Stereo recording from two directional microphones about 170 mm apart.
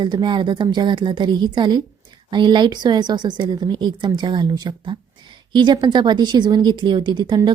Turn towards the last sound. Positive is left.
turn(degrees=-25)  # may be behind; listen again after turning